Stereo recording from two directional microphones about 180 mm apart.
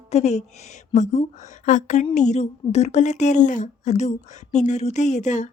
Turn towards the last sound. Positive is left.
turn(degrees=40)  # may be behind; listen again after turning